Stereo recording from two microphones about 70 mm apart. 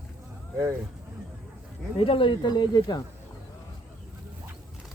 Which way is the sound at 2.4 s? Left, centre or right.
Left.